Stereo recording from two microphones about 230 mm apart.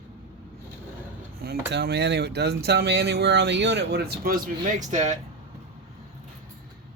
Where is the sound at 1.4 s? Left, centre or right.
Right.